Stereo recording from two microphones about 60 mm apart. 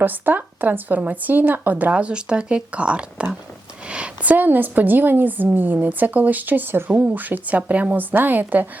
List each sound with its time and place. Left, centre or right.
0.0 s a woman's voice: right